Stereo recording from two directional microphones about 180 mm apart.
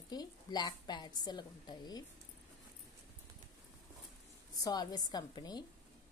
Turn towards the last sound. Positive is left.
turn(degrees=20)  # may be behind; listen again after turning